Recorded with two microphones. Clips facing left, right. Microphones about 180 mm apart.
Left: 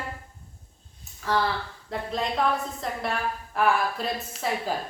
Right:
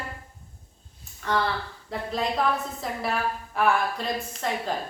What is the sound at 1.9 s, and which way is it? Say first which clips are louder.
A woman's voice: right 1 dB; centre (ahead or behind).